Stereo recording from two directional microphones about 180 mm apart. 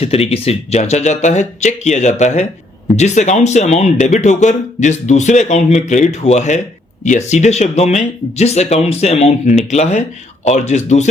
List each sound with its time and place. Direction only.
0.0 s speech: 35° left (ahead or behind)